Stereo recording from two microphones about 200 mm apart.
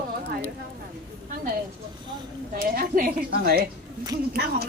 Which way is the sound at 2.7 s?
45° right (ahead or behind).